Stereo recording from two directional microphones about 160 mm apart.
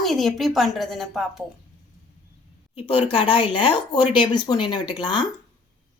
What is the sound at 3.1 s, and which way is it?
Speech, 35° left (ahead or behind).